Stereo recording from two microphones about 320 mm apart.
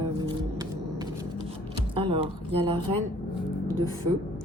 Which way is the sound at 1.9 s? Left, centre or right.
Centre.